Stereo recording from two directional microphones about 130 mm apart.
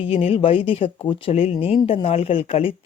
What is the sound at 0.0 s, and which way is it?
Speech, 45° left (ahead or behind).